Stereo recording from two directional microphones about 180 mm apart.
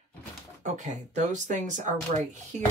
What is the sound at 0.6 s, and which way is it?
Speech, 40° right (ahead or behind).